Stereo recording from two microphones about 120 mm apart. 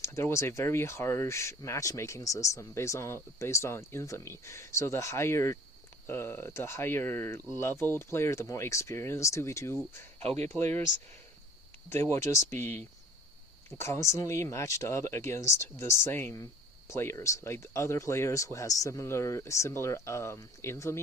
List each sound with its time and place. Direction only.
0.0 s speech: 20° left (ahead or behind)
10.2 s speech: 60° right (ahead or behind)
10.4 s speech: 20° left (ahead or behind)
11.9 s speech: 20° left (ahead or behind)